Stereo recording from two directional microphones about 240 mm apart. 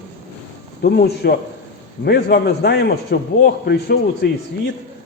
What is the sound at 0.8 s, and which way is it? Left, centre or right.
A man's voice, left.